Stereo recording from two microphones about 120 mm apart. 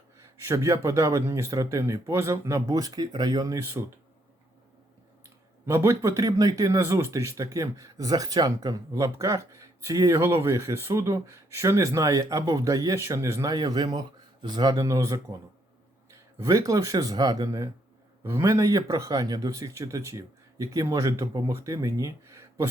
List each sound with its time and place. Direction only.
0.2 s speech: 25° right (ahead or behind)
5.6 s speech: 25° right (ahead or behind)